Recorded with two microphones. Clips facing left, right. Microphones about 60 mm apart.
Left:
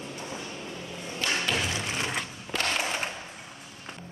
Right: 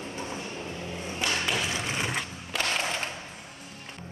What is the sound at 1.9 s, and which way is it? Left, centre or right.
Skateboard, centre.